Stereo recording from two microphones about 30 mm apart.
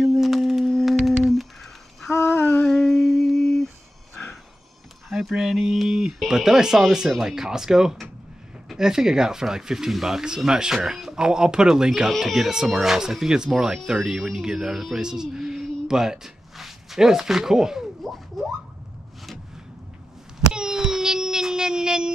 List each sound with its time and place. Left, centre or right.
0.1 s a sound: centre
0.8 s humming: centre
2.6 s humming: centre
5.3 s speech: centre
9.8 s speech: centre
10.2 s speech: right
12.1 s speech: centre; by 14.7 s right
14.7 s speech: centre
16.5 s a sound: centre
17.0 s speech: centre
18.4 s a sound: centre
20.4 s a sound: right